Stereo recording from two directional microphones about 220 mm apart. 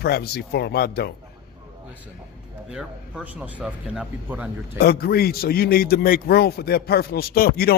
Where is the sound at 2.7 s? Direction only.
5° right (ahead or behind).